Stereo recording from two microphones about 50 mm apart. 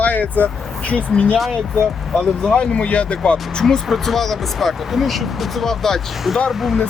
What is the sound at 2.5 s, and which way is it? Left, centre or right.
Speech, centre.